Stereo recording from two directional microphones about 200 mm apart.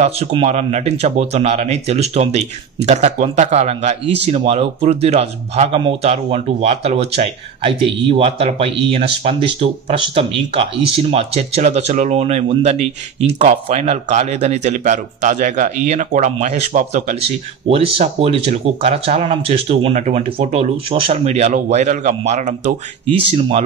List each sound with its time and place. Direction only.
0.0 s speech: 30° right (ahead or behind)